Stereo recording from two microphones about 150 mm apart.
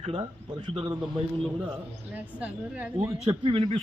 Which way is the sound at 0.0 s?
30° right (ahead or behind).